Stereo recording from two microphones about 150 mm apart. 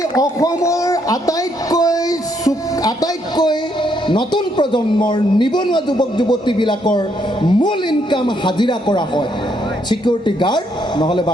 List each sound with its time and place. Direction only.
0.2 s a man's voice: 25° left (ahead or behind)